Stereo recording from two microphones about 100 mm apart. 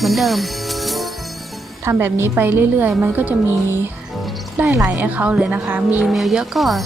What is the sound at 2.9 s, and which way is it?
Speech, 5° right (ahead or behind).